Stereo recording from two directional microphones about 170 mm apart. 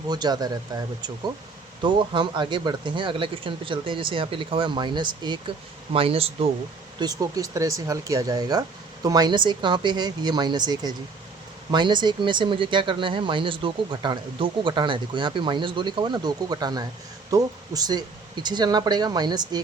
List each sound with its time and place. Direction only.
0.1 s speech: 25° right (ahead or behind)
7.0 s speech: 20° right (ahead or behind)